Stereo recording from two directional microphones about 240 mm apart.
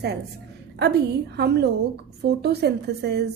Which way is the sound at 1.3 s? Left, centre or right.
Right.